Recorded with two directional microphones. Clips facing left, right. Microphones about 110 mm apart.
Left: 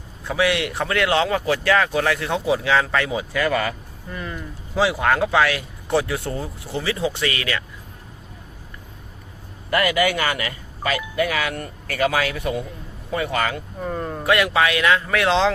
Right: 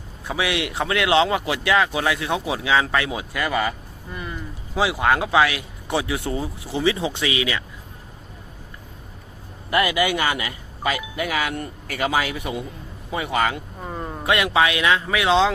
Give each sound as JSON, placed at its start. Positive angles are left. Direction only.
{"t": 0.3, "sound": "speech", "side_deg": -15}
{"t": 9.6, "sound": "speech", "side_deg": -20}
{"t": 14.3, "sound": "a man's voice", "side_deg": -20}
{"t": 15.1, "sound": "speech", "side_deg": -5}